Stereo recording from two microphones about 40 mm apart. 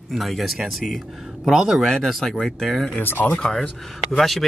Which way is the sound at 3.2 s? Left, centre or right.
Left.